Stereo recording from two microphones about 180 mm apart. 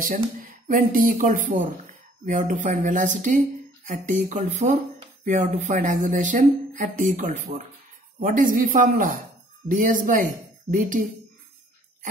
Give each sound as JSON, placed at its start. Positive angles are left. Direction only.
{"t": 0.0, "sound": "speech", "side_deg": -50}